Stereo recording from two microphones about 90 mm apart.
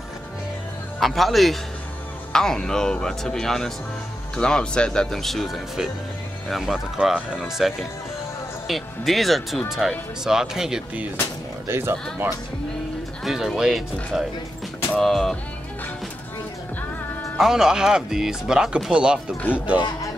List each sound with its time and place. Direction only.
0.9 s speech: centre (ahead or behind)
11.6 s speech: 30° right (ahead or behind)
13.2 s speech: 5° right (ahead or behind)
17.4 s speech: 5° right (ahead or behind)